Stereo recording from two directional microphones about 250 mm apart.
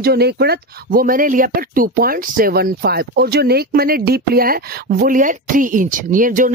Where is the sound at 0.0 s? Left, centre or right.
Right.